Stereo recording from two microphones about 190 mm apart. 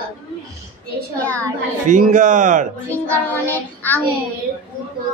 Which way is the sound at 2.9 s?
10° left (ahead or behind).